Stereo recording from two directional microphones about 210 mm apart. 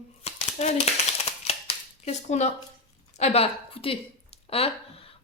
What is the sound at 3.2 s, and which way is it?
A woman's voice, 30° left (ahead or behind).